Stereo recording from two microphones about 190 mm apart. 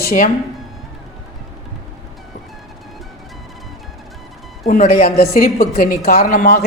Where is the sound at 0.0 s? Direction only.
50° left (ahead or behind).